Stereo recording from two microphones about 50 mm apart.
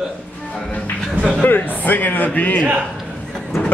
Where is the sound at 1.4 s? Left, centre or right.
Left.